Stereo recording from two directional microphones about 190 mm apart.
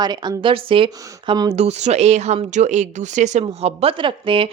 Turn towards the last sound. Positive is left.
turn(degrees=-25)  # may be behind; listen again after turning